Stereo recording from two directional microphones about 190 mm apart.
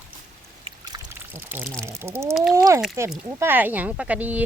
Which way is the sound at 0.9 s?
20° right (ahead or behind).